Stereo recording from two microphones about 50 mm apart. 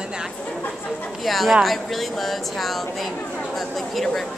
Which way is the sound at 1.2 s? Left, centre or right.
Centre.